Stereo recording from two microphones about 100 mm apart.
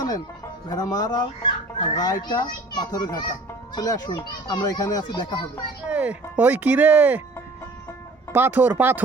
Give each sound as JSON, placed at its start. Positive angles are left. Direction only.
{"t": 0.7, "sound": "speech", "side_deg": 40}
{"t": 2.0, "sound": "a child's voice", "side_deg": 40}
{"t": 5.9, "sound": "speech", "side_deg": -15}
{"t": 8.3, "sound": "speech", "side_deg": -20}